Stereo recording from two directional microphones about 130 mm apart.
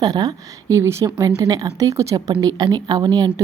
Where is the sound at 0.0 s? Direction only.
30° right (ahead or behind).